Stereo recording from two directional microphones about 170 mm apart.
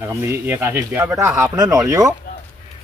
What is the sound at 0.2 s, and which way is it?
Speech, 15° right (ahead or behind).